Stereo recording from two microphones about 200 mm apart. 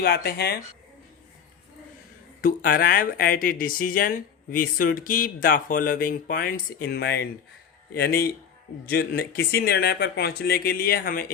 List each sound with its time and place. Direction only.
0.0 s speech: 50° left (ahead or behind)
2.4 s speech: 45° left (ahead or behind)